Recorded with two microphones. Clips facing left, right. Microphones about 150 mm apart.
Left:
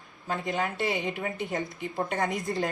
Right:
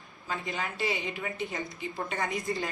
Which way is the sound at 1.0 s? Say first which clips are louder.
Left 4 dB; 45° left (ahead or behind).